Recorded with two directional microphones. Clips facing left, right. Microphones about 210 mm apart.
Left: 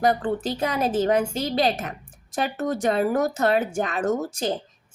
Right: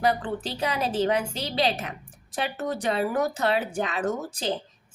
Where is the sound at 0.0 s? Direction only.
45° left (ahead or behind).